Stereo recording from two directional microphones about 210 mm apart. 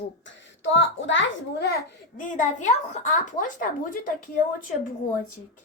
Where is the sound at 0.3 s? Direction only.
60° left (ahead or behind).